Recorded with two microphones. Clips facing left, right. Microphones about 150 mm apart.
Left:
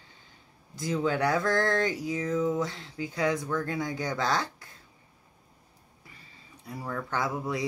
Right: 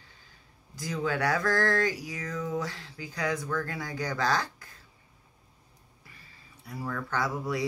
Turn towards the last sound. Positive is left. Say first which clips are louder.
# even
turn(degrees=20)  # may be behind; listen again after turning